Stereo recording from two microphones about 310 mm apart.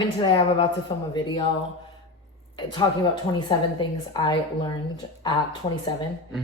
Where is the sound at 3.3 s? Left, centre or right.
Centre.